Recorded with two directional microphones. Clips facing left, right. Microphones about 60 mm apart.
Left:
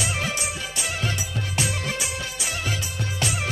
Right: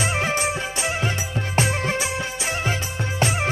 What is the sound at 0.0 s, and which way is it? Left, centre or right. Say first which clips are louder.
Music: right 5 dB; right.